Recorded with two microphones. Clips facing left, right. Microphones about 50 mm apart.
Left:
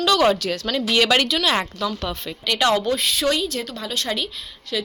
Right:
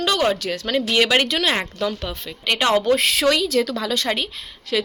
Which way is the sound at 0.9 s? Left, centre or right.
Centre.